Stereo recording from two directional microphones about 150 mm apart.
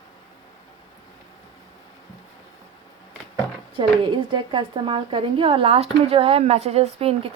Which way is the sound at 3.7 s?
30° right (ahead or behind).